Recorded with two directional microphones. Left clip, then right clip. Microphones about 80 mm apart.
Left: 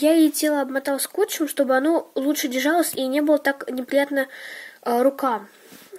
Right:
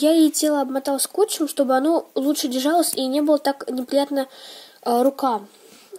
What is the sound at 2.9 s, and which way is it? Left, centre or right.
Speech, right.